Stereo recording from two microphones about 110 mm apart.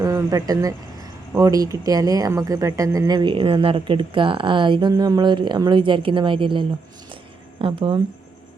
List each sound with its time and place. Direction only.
0.0 s speech: 35° right (ahead or behind); by 8.0 s 55° right (ahead or behind)